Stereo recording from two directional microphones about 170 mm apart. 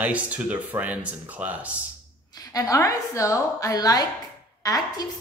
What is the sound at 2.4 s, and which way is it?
A woman's voice, 20° left (ahead or behind).